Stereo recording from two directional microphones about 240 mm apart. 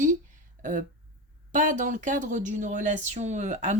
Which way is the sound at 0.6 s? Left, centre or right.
Right.